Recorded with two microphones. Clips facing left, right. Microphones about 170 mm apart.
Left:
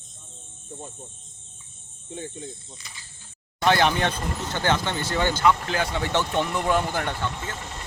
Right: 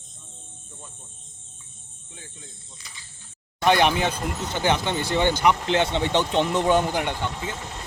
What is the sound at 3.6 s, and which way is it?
Speech, 15° right (ahead or behind).